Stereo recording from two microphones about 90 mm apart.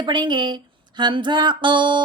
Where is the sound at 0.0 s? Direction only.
55° right (ahead or behind).